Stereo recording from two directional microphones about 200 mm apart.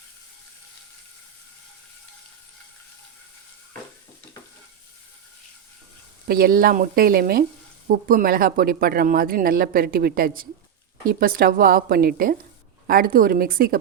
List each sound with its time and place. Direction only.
6.2 s speech: 50° right (ahead or behind)